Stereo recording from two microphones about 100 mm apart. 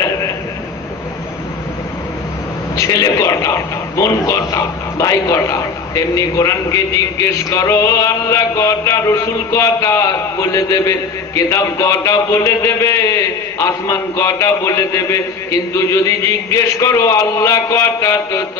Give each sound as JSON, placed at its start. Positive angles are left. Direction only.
{"t": 2.7, "sound": "a man's voice", "side_deg": 40}